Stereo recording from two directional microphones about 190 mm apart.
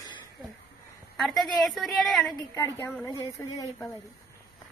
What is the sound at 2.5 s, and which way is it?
Speech, 10° left (ahead or behind).